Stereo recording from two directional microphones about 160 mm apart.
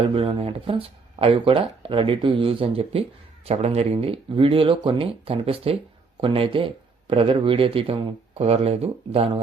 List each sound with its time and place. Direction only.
0.1 s speech: 35° right (ahead or behind)